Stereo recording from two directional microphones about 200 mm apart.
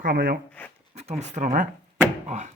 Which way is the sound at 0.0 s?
45° right (ahead or behind).